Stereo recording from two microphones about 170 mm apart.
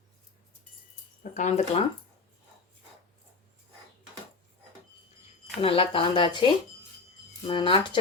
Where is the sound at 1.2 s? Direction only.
45° left (ahead or behind).